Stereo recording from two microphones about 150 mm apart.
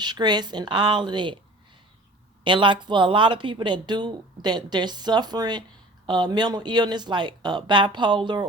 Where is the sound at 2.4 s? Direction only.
30° right (ahead or behind).